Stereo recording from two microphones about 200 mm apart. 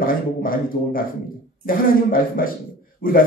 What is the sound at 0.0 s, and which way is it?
A man's voice, 45° left (ahead or behind).